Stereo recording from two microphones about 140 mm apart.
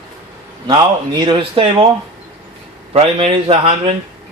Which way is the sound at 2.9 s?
45° right (ahead or behind).